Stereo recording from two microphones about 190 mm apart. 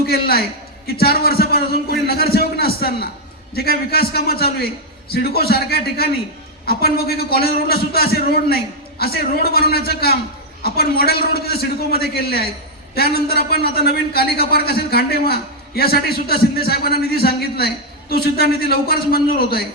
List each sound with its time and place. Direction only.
0.0 s a man's voice: 55° left (ahead or behind)